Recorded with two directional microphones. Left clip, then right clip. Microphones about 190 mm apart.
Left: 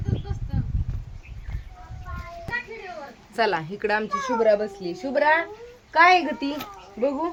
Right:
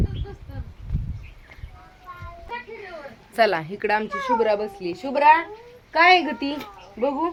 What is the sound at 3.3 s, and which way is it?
A woman's voice, 20° right (ahead or behind).